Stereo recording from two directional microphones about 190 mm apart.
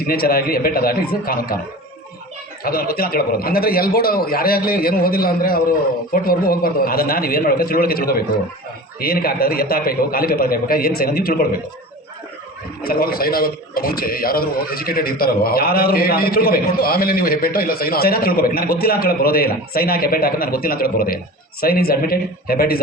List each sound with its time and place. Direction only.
0.1 s a man's voice: 50° left (ahead or behind)
2.6 s a man's voice: 50° left (ahead or behind)
12.8 s a man's voice: 50° left (ahead or behind)